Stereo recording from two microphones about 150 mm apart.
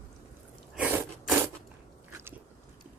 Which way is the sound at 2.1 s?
15° right (ahead or behind).